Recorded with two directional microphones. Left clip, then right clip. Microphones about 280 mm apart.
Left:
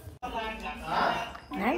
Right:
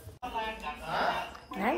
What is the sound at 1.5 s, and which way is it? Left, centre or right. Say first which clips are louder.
Chink: left 1 dB; right.